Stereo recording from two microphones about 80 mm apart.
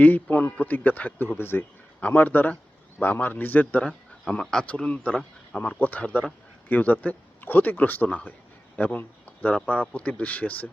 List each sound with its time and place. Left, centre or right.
0.0 s a man's voice: left